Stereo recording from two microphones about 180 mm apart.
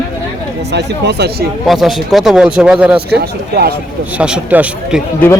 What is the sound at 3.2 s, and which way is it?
Speech, 60° right (ahead or behind).